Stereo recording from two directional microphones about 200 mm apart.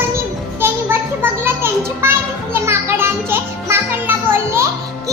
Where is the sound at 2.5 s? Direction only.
10° right (ahead or behind).